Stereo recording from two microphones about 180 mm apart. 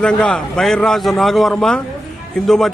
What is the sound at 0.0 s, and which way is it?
Speech, 5° left (ahead or behind).